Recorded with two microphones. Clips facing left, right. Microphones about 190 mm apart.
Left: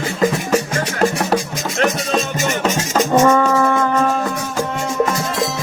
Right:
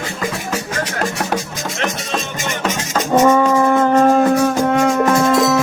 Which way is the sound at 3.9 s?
40° right (ahead or behind).